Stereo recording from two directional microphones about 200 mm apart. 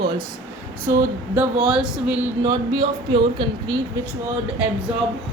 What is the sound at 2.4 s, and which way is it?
A woman's voice, 20° right (ahead or behind).